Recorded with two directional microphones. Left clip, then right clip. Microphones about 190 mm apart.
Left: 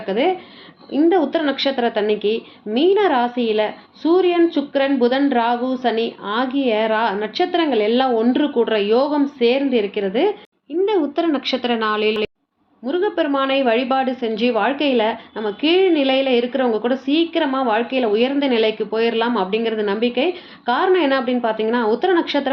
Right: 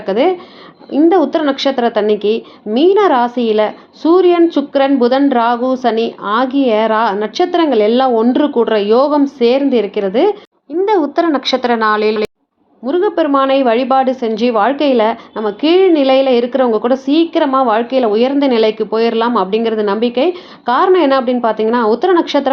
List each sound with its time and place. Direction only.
0.0 s a woman's voice: 30° right (ahead or behind)
10.8 s a woman's voice: 10° right (ahead or behind)
12.8 s a woman's voice: 30° right (ahead or behind)